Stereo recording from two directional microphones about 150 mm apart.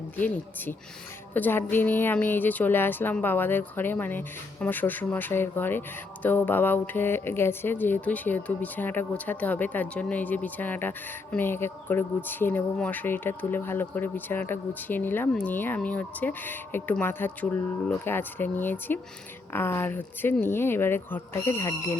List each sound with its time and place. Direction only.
0.2 s speech: 10° left (ahead or behind)